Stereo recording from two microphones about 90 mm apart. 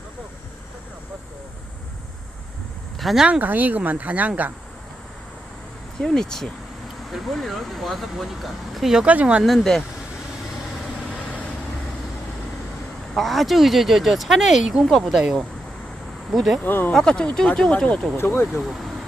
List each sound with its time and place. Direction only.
3.0 s speech: centre (ahead or behind)
3.2 s speech: 15° right (ahead or behind)
6.0 s speech: 5° left (ahead or behind); by 9.4 s 15° right (ahead or behind)
9.4 s speech: 5° left (ahead or behind)
11.1 s vehicle: 15° left (ahead or behind)
13.1 s speech: centre (ahead or behind)
16.6 s speech: 25° left (ahead or behind)
16.9 s speech: 10° left (ahead or behind)
18.2 s speech: 20° left (ahead or behind)